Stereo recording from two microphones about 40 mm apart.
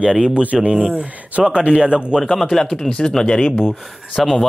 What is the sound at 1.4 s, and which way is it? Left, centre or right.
Speech, right.